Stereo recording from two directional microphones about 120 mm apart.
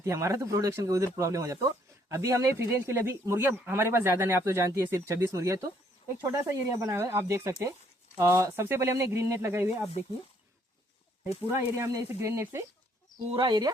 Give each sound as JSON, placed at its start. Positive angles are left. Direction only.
{"t": 0.0, "sound": "speech", "side_deg": -25}
{"t": 11.4, "sound": "speech", "side_deg": -25}
{"t": 13.3, "sound": "speech", "side_deg": -40}